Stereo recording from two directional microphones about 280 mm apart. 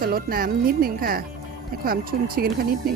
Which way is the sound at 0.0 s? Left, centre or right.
Right.